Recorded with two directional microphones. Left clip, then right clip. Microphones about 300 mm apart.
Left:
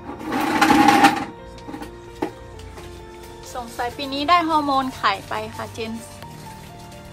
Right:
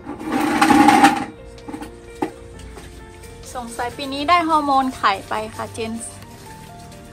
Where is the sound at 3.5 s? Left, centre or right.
Centre.